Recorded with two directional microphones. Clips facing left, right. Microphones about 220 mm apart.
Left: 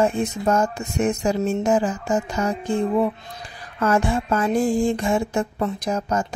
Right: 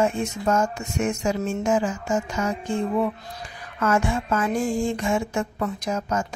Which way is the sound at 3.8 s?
35° left (ahead or behind).